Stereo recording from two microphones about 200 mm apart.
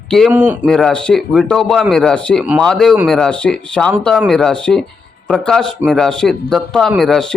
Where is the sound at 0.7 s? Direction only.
Centre (ahead or behind).